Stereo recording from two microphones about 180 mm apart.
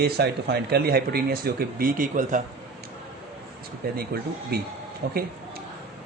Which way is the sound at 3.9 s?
60° right (ahead or behind).